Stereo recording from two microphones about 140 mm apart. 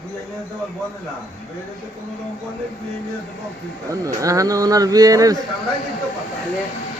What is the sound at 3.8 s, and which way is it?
Speech, 25° right (ahead or behind).